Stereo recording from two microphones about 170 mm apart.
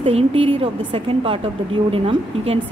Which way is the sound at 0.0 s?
30° right (ahead or behind).